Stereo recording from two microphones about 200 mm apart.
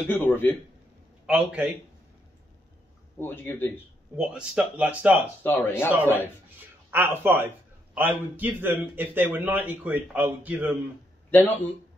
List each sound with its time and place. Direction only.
0.1 s speech: 10° left (ahead or behind)
1.2 s speech: 5° right (ahead or behind)
3.2 s speech: 10° left (ahead or behind)
4.2 s speech: 5° right (ahead or behind)
5.4 s speech: 10° left (ahead or behind)
5.9 s a man's voice: 10° right (ahead or behind)
11.2 s speech: 10° left (ahead or behind)